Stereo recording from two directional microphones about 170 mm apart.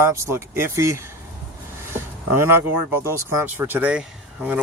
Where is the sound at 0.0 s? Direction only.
15° right (ahead or behind).